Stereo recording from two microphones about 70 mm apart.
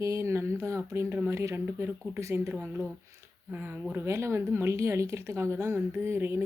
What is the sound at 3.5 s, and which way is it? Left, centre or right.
Speech, right.